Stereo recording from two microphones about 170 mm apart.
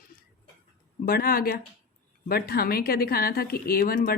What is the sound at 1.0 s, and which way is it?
Speech, 60° left (ahead or behind).